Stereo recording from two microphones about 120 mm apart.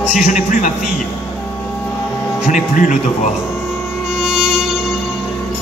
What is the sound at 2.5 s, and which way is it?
Speech, 90° left.